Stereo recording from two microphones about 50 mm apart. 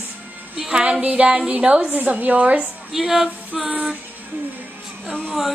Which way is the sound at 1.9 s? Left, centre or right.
Right.